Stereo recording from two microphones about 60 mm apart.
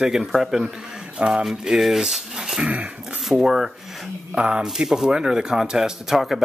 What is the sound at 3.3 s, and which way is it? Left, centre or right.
Speech, centre.